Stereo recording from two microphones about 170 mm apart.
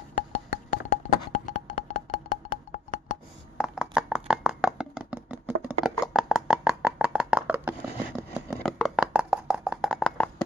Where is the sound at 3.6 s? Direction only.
5° right (ahead or behind).